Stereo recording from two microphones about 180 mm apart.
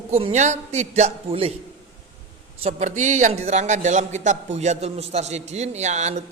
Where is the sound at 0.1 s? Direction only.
40° right (ahead or behind).